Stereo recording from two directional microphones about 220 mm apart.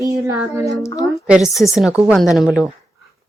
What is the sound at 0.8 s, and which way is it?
Speech, 15° left (ahead or behind).